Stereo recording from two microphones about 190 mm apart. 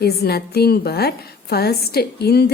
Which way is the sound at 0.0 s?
55° left (ahead or behind).